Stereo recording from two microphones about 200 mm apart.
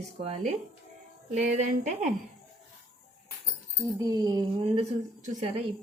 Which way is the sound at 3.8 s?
15° right (ahead or behind).